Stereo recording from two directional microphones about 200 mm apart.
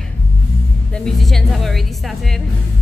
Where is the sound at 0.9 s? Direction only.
Centre (ahead or behind).